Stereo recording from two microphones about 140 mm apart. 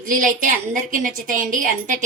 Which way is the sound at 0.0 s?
75° right (ahead or behind).